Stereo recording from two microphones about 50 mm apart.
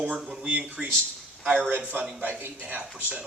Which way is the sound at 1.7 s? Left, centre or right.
Right.